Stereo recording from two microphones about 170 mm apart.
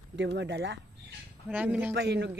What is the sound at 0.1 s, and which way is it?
Speech, 90° right.